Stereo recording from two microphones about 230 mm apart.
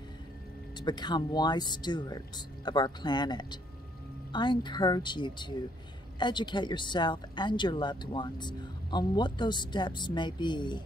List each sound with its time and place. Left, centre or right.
0.7 s speech: centre